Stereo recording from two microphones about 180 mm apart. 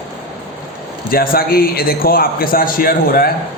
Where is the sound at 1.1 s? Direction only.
55° left (ahead or behind).